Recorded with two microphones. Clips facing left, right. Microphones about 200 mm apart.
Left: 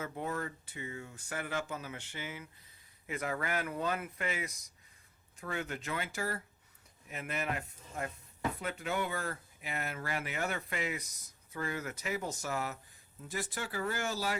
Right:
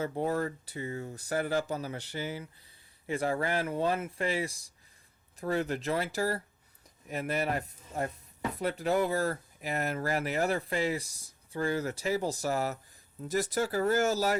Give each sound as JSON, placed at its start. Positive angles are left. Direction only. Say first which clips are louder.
{"t": 0.0, "sound": "speech", "louder": "right 7 dB", "side_deg": -35}